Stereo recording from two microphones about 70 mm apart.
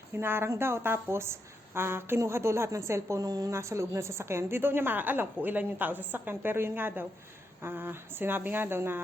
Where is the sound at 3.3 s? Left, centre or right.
Right.